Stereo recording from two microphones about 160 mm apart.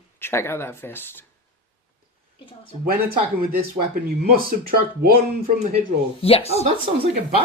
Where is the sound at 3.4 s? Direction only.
65° right (ahead or behind).